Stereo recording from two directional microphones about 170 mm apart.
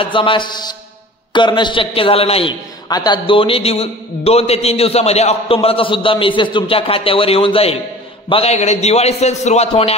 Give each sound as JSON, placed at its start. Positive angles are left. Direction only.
{"t": 0.0, "sound": "a man's voice", "side_deg": 30}
{"t": 2.9, "sound": "a man's voice", "side_deg": 25}